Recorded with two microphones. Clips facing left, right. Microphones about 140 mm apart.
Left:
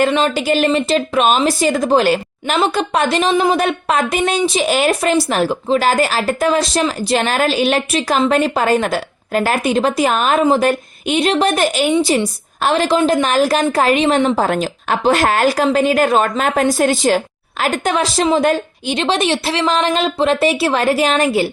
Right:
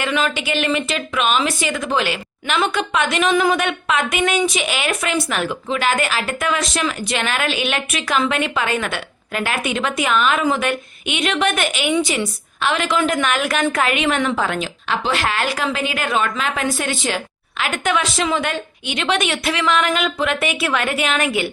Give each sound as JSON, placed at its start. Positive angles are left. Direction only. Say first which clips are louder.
{"t": 0.0, "sound": "a woman's voice", "louder": "left 6 dB", "side_deg": 35}